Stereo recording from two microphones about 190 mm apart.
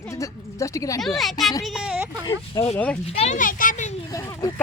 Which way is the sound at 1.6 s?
5° right (ahead or behind).